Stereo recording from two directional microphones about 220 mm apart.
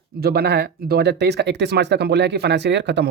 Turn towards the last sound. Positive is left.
turn(degrees=-50)  # may be behind; listen again after turning